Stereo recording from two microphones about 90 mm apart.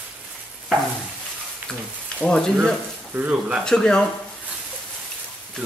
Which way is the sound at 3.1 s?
15° right (ahead or behind).